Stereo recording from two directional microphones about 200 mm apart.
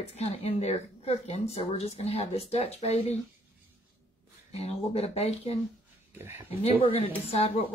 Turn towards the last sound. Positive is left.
turn(degrees=30)  # may be behind; listen again after turning